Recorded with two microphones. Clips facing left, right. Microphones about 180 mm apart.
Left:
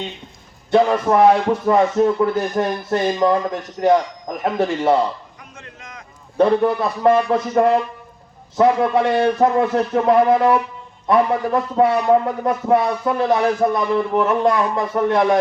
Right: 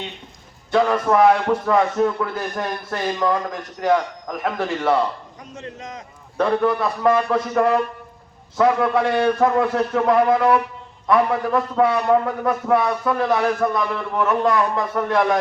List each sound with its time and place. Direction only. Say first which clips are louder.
0.7 s speech: left 3 dB; 25° left (ahead or behind)
5.6 s a man's voice: right 9 dB; 35° right (ahead or behind)
6.3 s speech: left 3 dB; 30° left (ahead or behind)